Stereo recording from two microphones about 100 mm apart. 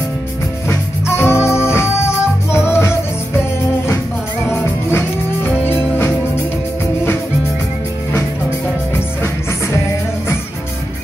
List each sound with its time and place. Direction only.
0.7 s music: 25° left (ahead or behind)